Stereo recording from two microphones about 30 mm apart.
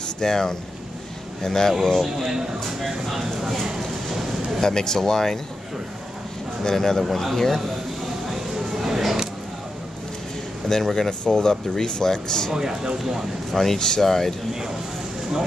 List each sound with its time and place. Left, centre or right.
0.2 s speech: centre
2.8 s speech: centre
3.6 s vehicle: centre
4.6 s speech: left
6.6 s speech: centre
7.1 s speech: centre
7.3 s speech: centre
8.3 s a sound: centre
10.7 s speech: centre
12.5 s speech: right
13.0 s speech: centre
13.6 s speech: centre
14.0 s speech: centre